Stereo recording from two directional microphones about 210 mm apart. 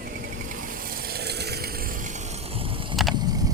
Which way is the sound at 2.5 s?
25° right (ahead or behind).